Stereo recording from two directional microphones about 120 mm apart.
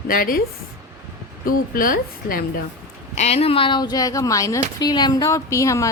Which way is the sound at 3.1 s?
60° left (ahead or behind).